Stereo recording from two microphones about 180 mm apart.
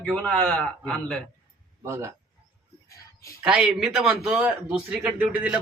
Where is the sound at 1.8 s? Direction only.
15° right (ahead or behind).